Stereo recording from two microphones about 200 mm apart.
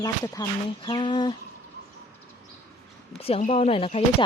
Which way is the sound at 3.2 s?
30° left (ahead or behind).